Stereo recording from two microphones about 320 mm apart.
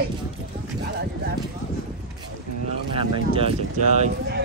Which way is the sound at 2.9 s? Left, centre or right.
Centre.